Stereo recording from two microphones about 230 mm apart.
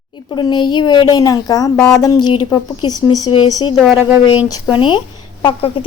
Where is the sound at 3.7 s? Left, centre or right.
Centre.